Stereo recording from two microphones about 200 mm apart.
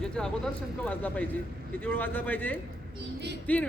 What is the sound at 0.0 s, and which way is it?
Speech, 5° left (ahead or behind).